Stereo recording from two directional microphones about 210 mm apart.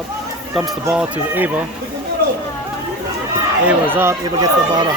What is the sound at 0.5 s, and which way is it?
Speech, 5° right (ahead or behind).